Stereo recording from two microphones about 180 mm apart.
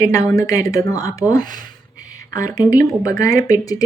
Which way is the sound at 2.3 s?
20° left (ahead or behind).